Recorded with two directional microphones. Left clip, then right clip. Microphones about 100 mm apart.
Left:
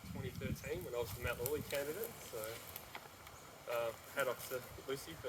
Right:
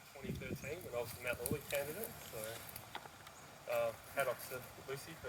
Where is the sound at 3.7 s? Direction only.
25° left (ahead or behind).